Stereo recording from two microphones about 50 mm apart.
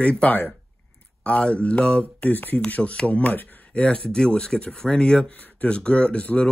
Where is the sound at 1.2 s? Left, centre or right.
Left.